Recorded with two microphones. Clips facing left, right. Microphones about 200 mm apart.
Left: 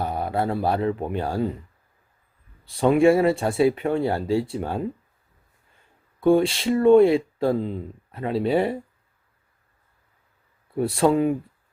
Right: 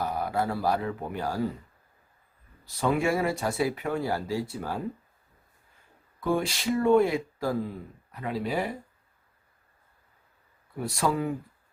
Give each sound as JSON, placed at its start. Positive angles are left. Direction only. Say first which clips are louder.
{"t": 0.0, "sound": "speech", "louder": "left 4 dB", "side_deg": 25}
{"t": 2.7, "sound": "speech", "louder": "left 9 dB", "side_deg": 25}
{"t": 6.1, "sound": "speech", "louder": "left 9 dB", "side_deg": 30}
{"t": 10.8, "sound": "speech", "louder": "left 8 dB", "side_deg": 25}